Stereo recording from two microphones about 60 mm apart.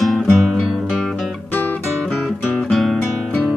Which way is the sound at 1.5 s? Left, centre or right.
Left.